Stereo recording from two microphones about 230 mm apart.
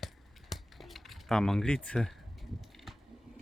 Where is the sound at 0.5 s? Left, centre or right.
Centre.